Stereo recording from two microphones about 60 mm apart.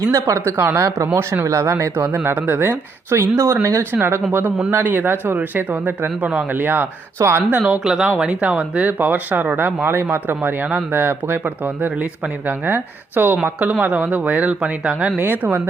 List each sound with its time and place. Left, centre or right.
0.1 s speech: right
0.5 s speech: right
0.8 s speech: right
2.1 s speech: right
4.3 s speech: right
7.2 s speech: right
7.5 s speech: right
7.9 s speech: centre
8.2 s speech: right
15.2 s speech: right